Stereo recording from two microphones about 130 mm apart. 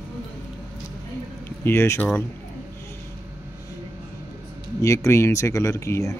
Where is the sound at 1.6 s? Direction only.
20° left (ahead or behind).